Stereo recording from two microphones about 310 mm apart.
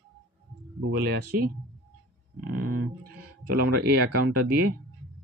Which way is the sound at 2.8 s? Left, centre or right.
Right.